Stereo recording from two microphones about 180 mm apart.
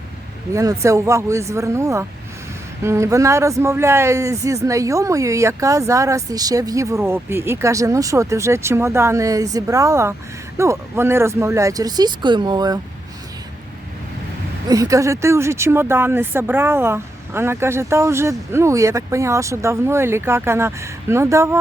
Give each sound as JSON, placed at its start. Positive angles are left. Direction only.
{"t": 0.5, "sound": "a man's voice", "side_deg": -20}
{"t": 14.7, "sound": "a man's voice", "side_deg": -20}